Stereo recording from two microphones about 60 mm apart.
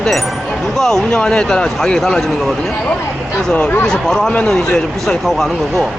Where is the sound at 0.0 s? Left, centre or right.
Centre.